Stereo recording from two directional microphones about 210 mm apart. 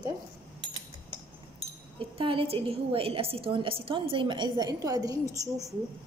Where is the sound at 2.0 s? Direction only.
25° right (ahead or behind).